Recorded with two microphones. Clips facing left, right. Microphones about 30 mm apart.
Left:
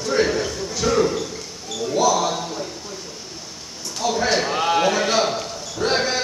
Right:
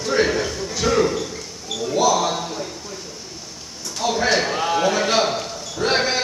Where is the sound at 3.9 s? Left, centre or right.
Centre.